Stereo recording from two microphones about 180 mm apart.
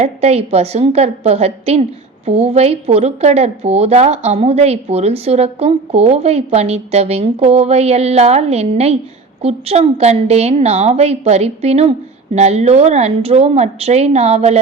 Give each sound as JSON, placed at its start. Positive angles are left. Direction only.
{"t": 0.0, "sound": "a woman's voice", "side_deg": -35}